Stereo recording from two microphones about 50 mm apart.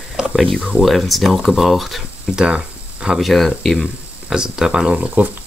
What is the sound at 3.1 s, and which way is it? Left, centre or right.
Speech, centre.